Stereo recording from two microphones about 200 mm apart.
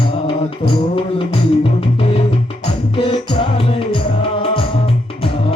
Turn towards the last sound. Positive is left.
turn(degrees=25)  # may be behind; listen again after turning